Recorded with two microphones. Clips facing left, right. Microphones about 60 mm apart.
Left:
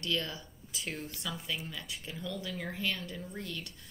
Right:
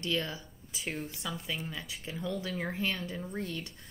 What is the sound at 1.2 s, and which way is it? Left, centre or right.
Speech, right.